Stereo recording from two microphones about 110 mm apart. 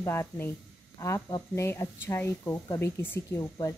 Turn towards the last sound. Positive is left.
turn(degrees=25)  # may be behind; listen again after turning